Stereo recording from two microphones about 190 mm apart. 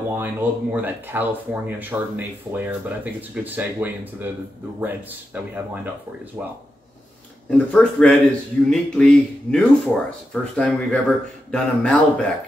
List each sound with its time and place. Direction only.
0.1 s speech: 10° right (ahead or behind)
7.5 s speech: 5° left (ahead or behind)